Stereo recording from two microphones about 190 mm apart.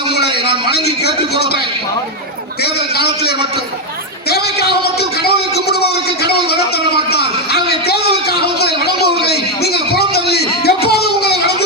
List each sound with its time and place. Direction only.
0.7 s a man's voice: 60° left (ahead or behind)
2.9 s a man's voice: 55° left (ahead or behind)
4.3 s a sound: 55° left (ahead or behind)